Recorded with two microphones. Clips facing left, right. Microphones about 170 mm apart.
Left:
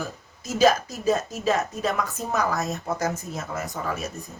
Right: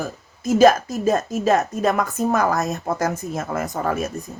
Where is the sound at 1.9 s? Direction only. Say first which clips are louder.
Right 9 dB; 50° right (ahead or behind).